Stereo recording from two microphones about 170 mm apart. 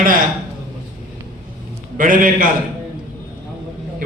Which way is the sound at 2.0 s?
55° right (ahead or behind).